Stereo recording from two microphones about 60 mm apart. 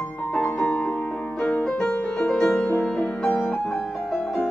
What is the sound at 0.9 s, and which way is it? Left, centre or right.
Music, centre.